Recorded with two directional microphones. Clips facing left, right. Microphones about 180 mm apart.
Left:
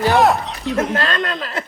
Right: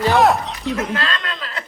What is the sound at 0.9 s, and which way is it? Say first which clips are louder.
Speech: left 4 dB; 45° left (ahead or behind).